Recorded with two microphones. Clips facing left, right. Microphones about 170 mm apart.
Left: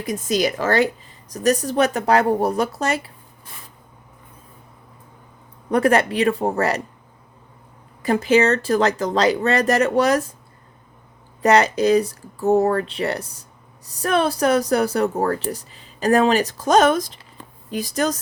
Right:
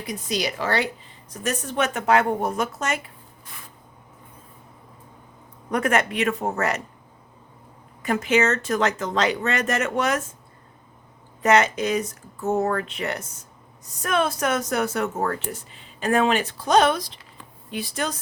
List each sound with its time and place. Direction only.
0.0 s a woman's voice: 45° left (ahead or behind)
5.7 s a woman's voice: 35° left (ahead or behind)
8.0 s a woman's voice: 35° left (ahead or behind)
11.4 s a woman's voice: 35° left (ahead or behind)